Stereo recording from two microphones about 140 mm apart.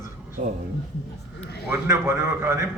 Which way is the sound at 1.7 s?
20° right (ahead or behind).